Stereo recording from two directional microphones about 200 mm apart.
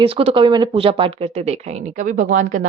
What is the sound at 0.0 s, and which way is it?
Speech, 30° right (ahead or behind).